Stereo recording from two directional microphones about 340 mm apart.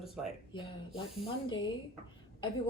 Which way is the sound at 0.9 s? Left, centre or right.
Centre.